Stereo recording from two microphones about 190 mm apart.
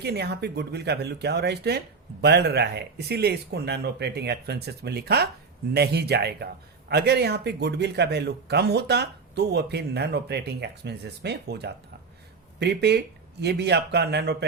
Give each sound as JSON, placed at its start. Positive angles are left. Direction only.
{"t": 0.0, "sound": "speech", "side_deg": -60}